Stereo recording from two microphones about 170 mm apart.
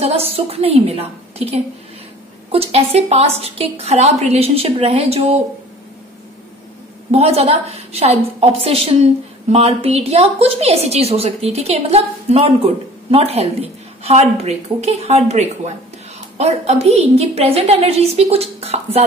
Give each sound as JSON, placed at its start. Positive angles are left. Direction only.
{"t": 0.0, "sound": "a woman's voice", "side_deg": -35}
{"t": 7.1, "sound": "a woman's voice", "side_deg": -35}